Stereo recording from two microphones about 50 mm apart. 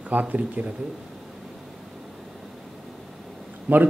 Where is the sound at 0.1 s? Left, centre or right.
Right.